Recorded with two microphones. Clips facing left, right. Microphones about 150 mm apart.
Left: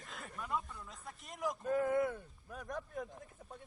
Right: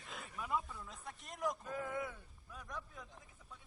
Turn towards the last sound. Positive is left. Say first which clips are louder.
# left 7 dB
turn(degrees=50)  # may be behind; listen again after turning